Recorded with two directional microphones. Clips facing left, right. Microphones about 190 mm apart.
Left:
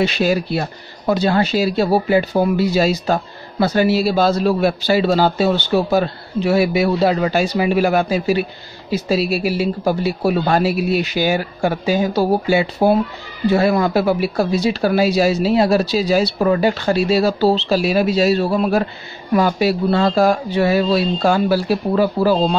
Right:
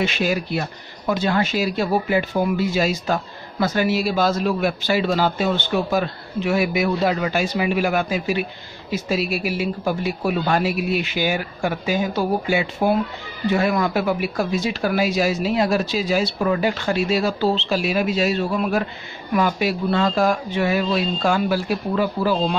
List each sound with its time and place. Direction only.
0.0 s speech: 35° left (ahead or behind)